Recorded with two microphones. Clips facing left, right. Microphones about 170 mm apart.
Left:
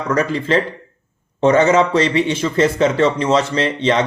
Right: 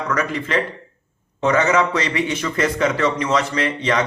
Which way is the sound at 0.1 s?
30° left (ahead or behind).